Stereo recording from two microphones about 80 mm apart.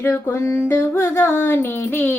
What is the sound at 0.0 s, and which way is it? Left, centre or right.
Music, left.